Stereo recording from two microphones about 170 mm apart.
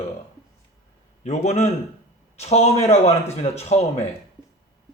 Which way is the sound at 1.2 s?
40° left (ahead or behind).